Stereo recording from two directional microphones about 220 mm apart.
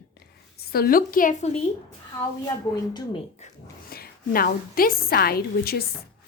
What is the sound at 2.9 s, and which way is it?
Speech, 25° left (ahead or behind).